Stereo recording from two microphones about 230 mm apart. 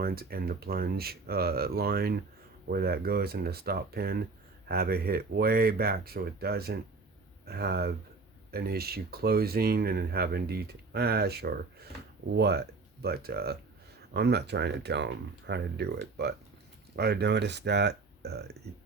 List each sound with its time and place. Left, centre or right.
0.0 s speech: right